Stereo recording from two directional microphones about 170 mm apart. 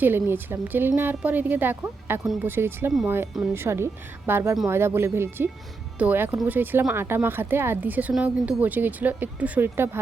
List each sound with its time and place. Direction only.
0.0 s speech: 10° right (ahead or behind)
2.2 s speech: centre (ahead or behind)
2.5 s speech: 15° right (ahead or behind)